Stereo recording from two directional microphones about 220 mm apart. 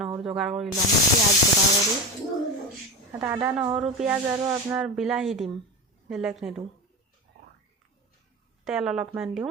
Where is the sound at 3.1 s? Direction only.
10° right (ahead or behind).